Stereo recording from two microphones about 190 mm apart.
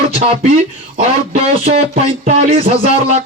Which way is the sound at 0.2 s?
35° right (ahead or behind).